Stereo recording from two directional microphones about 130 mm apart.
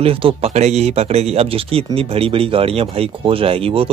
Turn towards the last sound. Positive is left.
turn(degrees=-45)  # may be behind; listen again after turning